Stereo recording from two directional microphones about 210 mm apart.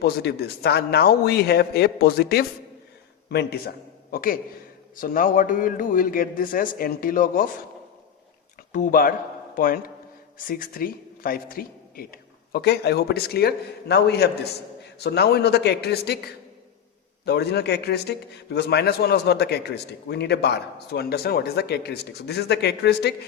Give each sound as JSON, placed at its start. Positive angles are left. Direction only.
{"t": 0.0, "sound": "a man's voice", "side_deg": 50}
{"t": 8.7, "sound": "a man's voice", "side_deg": 40}